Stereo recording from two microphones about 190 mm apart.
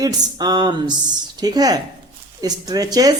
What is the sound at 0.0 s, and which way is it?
Speech, 20° right (ahead or behind).